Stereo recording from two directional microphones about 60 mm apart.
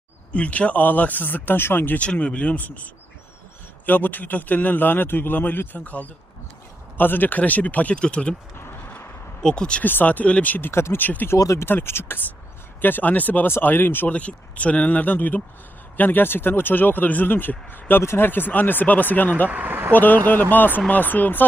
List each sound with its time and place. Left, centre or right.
0.3 s speech: left
2.0 s speech: left
3.8 s speech: left
9.4 s speech: centre
9.8 s speech: left
10.7 s speech: left
11.0 s speech: left
11.3 s speech: left
11.6 s speech: left
14.1 s speech: left
19.5 s speech: right
19.9 s speech: left